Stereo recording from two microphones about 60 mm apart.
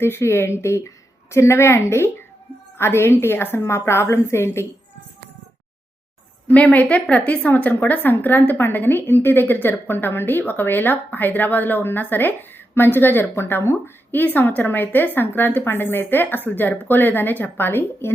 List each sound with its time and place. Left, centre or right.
0.0 s a woman's voice: left
6.5 s a woman's voice: left